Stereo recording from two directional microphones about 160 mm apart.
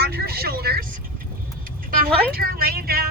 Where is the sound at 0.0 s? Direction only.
80° right.